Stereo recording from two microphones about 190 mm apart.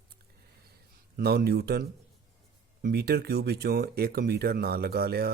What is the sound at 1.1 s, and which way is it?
Speech, 55° right (ahead or behind).